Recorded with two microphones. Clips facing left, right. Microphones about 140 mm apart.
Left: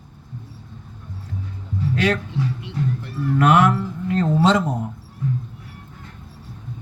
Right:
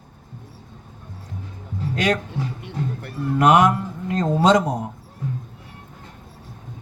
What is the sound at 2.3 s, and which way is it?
Music, 50° right (ahead or behind).